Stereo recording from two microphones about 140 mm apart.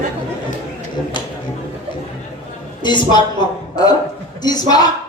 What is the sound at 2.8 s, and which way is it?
Speech, 35° left (ahead or behind).